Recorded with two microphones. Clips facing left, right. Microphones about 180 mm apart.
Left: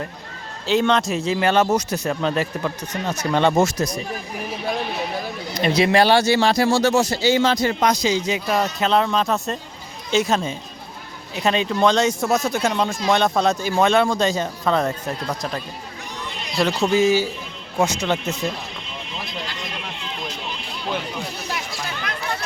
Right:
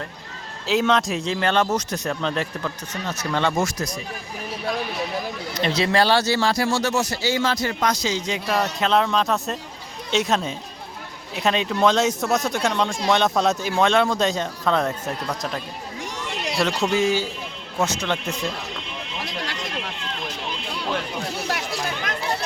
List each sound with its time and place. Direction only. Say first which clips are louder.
0.7 s speech: left 2 dB; centre (ahead or behind)
3.1 s speech: left 5 dB; 15° left (ahead or behind)
5.5 s speech: left 4 dB; 10° left (ahead or behind)
16.3 s chatter: right 5 dB; 75° right (ahead or behind)
16.6 s speech: left 3 dB; centre (ahead or behind)